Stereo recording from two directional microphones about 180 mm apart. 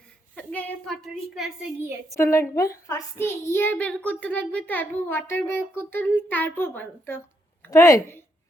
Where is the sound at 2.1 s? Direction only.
15° left (ahead or behind).